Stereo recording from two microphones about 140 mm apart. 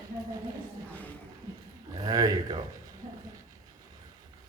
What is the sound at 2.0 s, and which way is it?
Speech, 30° right (ahead or behind).